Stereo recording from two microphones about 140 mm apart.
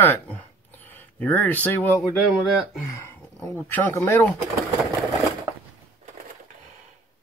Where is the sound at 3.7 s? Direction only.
15° left (ahead or behind).